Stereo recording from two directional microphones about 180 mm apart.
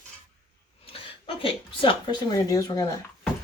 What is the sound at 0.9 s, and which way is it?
Speech, 30° left (ahead or behind).